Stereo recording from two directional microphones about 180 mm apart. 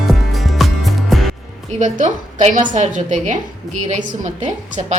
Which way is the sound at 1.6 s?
40° right (ahead or behind).